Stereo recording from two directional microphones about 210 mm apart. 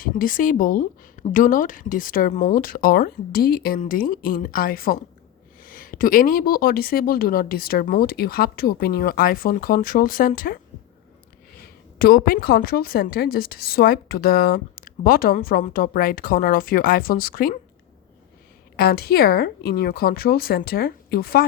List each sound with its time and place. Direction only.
0.0 s a woman's voice: 40° left (ahead or behind)
11.9 s a woman's voice: 45° left (ahead or behind)
18.8 s a woman's voice: 50° left (ahead or behind)